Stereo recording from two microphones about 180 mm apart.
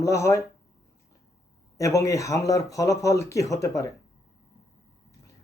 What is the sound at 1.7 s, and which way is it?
Speech, 15° left (ahead or behind).